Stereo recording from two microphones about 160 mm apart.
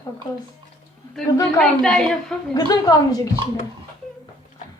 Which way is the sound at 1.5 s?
5° left (ahead or behind).